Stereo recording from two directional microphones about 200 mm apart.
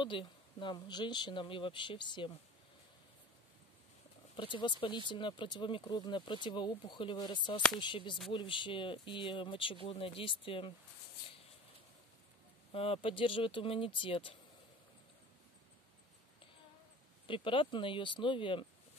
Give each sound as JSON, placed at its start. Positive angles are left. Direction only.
{"t": 0.0, "sound": "speech", "side_deg": 25}
{"t": 4.4, "sound": "speech", "side_deg": 25}
{"t": 12.7, "sound": "speech", "side_deg": 30}
{"t": 17.3, "sound": "speech", "side_deg": 25}